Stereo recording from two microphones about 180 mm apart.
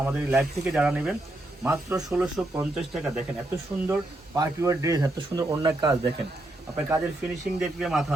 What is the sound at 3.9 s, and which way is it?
Speech, 20° right (ahead or behind).